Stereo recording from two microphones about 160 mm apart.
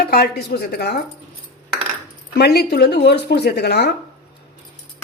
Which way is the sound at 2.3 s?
80° left.